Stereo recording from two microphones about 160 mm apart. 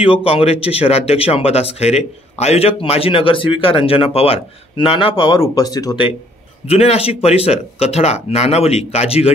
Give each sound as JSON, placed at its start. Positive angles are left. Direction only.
{"t": 0.0, "sound": "speech", "side_deg": 35}
{"t": 5.4, "sound": "speech", "side_deg": 20}
{"t": 6.7, "sound": "speech", "side_deg": 40}